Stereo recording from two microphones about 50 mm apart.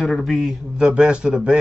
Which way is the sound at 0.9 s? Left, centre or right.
Centre.